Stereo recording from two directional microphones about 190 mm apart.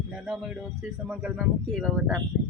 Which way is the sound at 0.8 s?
5° right (ahead or behind).